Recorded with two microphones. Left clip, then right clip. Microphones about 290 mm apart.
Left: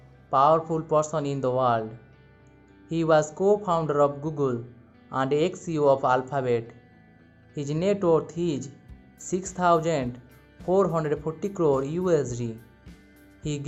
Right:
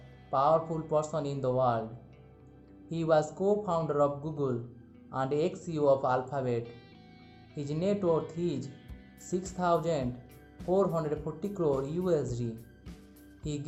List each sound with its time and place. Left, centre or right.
0.3 s speech: left
2.9 s speech: left